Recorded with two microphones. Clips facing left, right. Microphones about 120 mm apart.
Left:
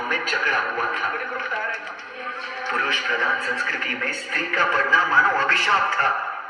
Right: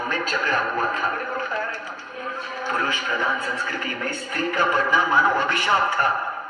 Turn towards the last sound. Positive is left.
turn(degrees=-25)  # may be behind; listen again after turning